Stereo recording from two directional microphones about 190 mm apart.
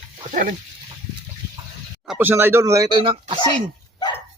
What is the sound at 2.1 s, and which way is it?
Speech, 10° right (ahead or behind).